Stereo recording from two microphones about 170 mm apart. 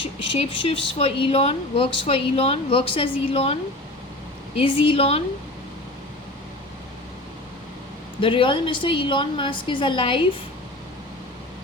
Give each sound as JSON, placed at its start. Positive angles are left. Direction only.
{"t": 0.0, "sound": "speech", "side_deg": 30}
{"t": 8.2, "sound": "a woman's voice", "side_deg": 30}